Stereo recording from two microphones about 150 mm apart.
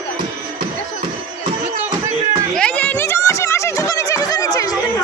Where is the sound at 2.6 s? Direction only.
10° left (ahead or behind); by 5.0 s 25° left (ahead or behind).